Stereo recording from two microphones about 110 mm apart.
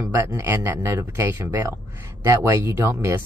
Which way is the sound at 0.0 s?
25° right (ahead or behind).